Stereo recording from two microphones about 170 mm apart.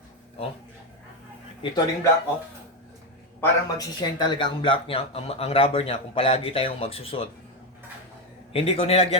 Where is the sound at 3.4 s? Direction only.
20° left (ahead or behind).